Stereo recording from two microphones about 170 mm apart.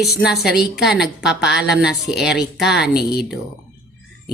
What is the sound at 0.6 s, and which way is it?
Speech, 75° left (ahead or behind).